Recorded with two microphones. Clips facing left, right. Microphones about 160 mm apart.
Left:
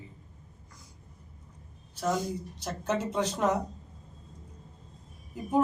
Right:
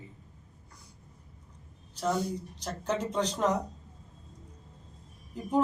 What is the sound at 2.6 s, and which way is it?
Speech, 10° left (ahead or behind).